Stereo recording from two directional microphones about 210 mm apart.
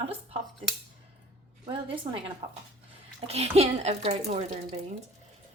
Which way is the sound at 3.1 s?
30° right (ahead or behind).